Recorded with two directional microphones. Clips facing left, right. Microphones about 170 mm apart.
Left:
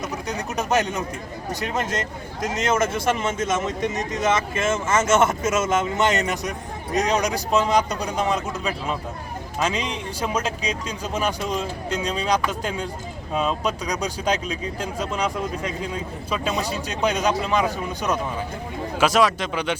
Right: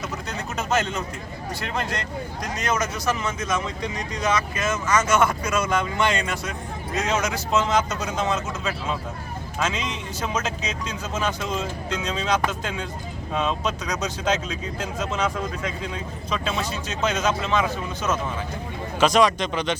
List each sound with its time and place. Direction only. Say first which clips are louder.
0.1 s speech: left 3 dB; 15° left (ahead or behind)
7.9 s speech: left 2 dB; 35° left (ahead or behind)
8.1 s speech: left 2 dB; 10° left (ahead or behind)